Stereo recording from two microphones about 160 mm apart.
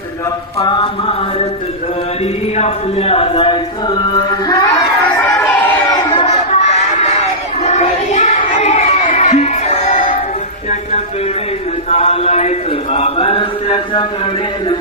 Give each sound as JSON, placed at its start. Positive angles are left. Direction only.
{"t": 0.6, "sound": "chant", "side_deg": 30}
{"t": 2.6, "sound": "chant", "side_deg": 40}
{"t": 5.4, "sound": "a sound", "side_deg": 15}
{"t": 6.0, "sound": "a sound", "side_deg": 35}
{"t": 7.6, "sound": "crowd", "side_deg": 45}
{"t": 11.9, "sound": "chant", "side_deg": 40}